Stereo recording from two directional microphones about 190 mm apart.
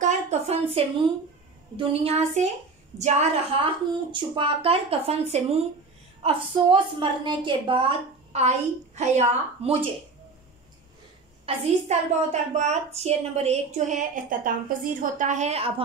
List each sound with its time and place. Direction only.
0.0 s a sound: 35° right (ahead or behind)
1.8 s a woman's voice: 30° right (ahead or behind)
11.4 s a woman's voice: 35° right (ahead or behind)